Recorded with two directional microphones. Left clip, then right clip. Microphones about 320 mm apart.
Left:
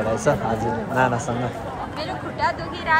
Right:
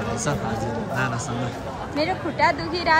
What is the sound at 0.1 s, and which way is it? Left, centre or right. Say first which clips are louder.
Speech: left 7 dB; centre.